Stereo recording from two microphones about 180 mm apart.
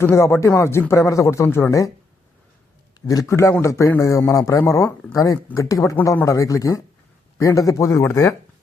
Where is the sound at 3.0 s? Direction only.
20° left (ahead or behind).